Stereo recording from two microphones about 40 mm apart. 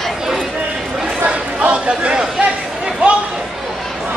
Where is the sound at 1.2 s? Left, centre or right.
Right.